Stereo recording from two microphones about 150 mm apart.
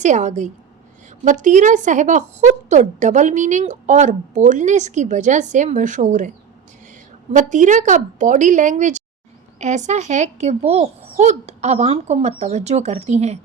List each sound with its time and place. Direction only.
0.0 s a woman's voice: 50° right (ahead or behind)
7.3 s a woman's voice: 55° right (ahead or behind)